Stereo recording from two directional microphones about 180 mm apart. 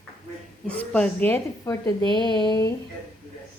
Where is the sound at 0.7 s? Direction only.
5° left (ahead or behind); by 2.7 s 20° left (ahead or behind).